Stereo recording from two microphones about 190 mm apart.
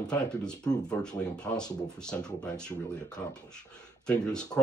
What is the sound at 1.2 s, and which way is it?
Speech, 5° left (ahead or behind).